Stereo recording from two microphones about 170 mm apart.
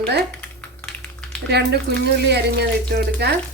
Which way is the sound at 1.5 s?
75° right (ahead or behind).